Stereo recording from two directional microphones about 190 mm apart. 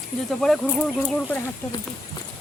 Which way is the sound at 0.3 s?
Centre (ahead or behind).